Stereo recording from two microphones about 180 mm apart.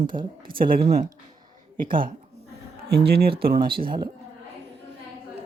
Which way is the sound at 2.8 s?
60° right (ahead or behind).